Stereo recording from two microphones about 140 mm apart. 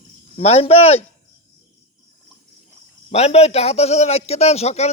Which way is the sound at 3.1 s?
50° left (ahead or behind).